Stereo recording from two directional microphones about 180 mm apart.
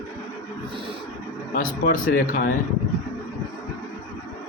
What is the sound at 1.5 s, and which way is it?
Speech, 50° left (ahead or behind).